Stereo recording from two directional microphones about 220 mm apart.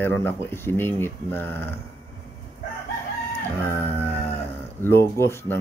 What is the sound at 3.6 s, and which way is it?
Speech, 10° left (ahead or behind).